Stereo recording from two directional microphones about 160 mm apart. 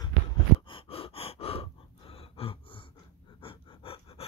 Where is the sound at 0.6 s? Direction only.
35° left (ahead or behind).